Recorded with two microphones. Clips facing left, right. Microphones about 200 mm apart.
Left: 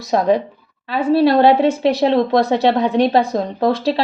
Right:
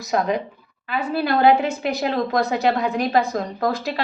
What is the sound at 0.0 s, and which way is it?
A woman's voice, 30° left (ahead or behind).